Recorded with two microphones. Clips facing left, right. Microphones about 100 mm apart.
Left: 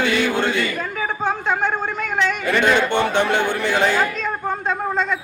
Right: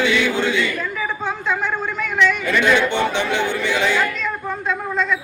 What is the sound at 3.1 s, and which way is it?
Speech, 50° left (ahead or behind).